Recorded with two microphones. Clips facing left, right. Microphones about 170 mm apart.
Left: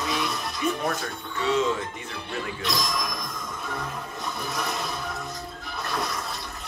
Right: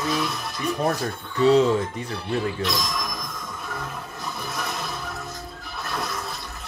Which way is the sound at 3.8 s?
Centre (ahead or behind).